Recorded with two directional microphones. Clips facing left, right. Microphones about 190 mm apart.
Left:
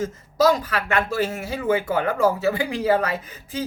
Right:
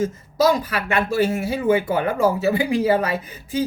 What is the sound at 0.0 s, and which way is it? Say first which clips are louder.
Speech: right 1 dB; 10° right (ahead or behind).